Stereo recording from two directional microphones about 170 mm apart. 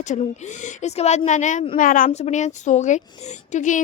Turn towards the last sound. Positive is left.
turn(degrees=50)  # may be behind; listen again after turning